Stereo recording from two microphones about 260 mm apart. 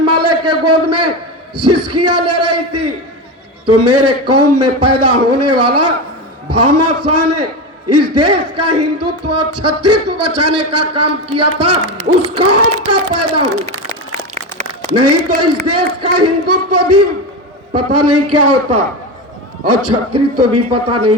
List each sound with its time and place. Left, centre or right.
0.0 s a sound: right
1.5 s speech: right
14.8 s a man's voice: right